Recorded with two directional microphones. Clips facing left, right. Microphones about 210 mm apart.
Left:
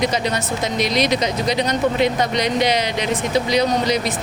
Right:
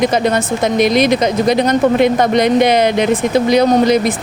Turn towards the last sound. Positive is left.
turn(degrees=-50)  # may be behind; listen again after turning